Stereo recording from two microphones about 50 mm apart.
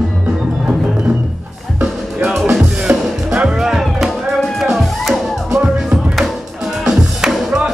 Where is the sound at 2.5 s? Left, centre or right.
Centre.